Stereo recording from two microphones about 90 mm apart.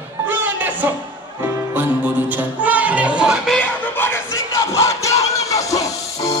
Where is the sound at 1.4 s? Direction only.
20° right (ahead or behind).